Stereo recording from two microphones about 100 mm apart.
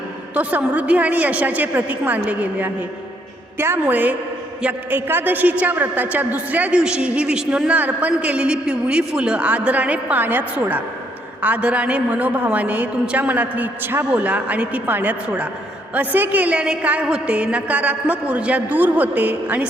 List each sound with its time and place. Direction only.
0.3 s a woman's voice: 15° right (ahead or behind)